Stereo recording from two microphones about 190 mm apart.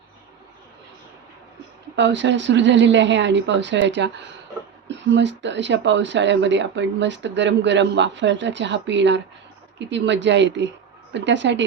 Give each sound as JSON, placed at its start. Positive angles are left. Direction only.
{"t": 2.0, "sound": "speech", "side_deg": -70}